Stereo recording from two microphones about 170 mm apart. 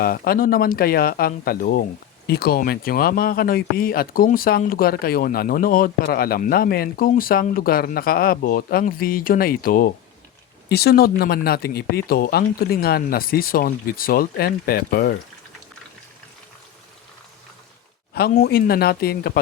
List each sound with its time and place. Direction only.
0.0 s speech: 60° left (ahead or behind)
10.7 s speech: 70° left (ahead or behind)
18.1 s speech: 65° left (ahead or behind)